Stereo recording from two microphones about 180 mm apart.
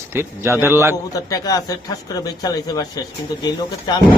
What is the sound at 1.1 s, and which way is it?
Speech, 20° left (ahead or behind).